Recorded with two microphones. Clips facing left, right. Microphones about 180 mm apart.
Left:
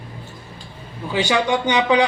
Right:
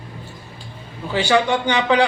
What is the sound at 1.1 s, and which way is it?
Speech, 15° left (ahead or behind).